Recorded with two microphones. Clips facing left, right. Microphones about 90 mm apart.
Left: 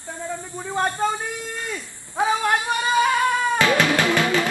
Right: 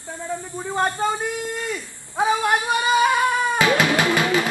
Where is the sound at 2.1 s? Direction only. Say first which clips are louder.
Right 1 dB; 15° right (ahead or behind).